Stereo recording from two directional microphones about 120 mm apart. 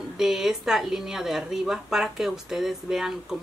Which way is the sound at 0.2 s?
5° right (ahead or behind).